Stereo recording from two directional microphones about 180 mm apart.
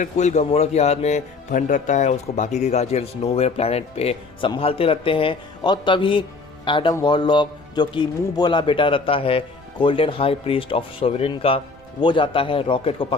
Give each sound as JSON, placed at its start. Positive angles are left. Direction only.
{"t": 0.0, "sound": "speech", "side_deg": 40}